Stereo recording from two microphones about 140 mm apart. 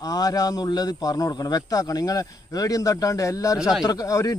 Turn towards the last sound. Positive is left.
turn(degrees=25)  # may be behind; listen again after turning